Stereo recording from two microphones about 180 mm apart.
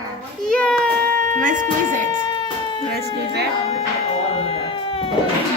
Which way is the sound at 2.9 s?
70° right (ahead or behind).